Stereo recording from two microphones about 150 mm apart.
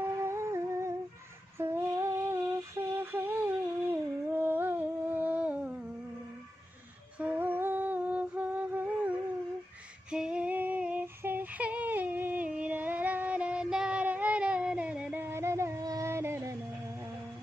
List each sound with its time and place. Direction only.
0.2 s humming: 20° right (ahead or behind)
1.6 s a sound: 15° right (ahead or behind)
7.2 s music: 10° right (ahead or behind)
10.1 s female singing: 5° right (ahead or behind)